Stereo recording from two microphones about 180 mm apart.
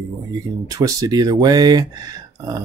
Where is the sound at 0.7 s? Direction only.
20° right (ahead or behind).